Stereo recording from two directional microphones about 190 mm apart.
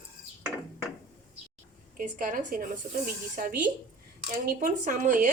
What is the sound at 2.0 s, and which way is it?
Speech, 45° right (ahead or behind).